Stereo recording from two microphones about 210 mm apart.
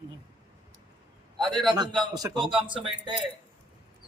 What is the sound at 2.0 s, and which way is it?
A man's voice, 15° right (ahead or behind).